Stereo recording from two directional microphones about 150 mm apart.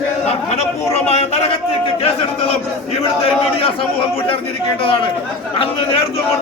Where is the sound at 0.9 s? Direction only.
45° left (ahead or behind).